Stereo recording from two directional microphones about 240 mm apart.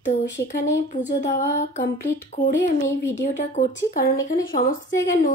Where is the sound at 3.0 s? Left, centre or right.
Left.